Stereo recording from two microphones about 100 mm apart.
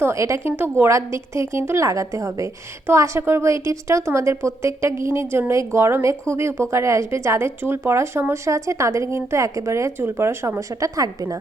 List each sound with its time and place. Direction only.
0.0 s a woman's voice: 30° right (ahead or behind)